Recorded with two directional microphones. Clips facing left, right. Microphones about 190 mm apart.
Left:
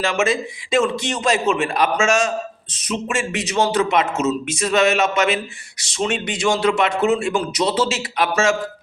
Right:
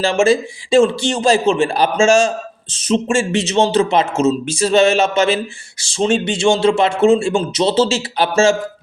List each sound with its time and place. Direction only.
0.0 s speech: 30° right (ahead or behind)